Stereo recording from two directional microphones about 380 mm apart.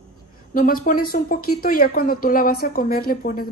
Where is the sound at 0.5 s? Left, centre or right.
Left.